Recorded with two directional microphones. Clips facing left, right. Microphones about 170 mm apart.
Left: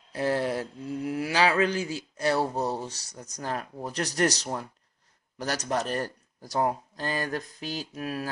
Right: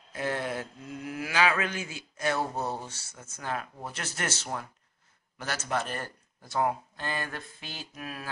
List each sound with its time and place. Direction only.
0.1 s speech: 35° left (ahead or behind)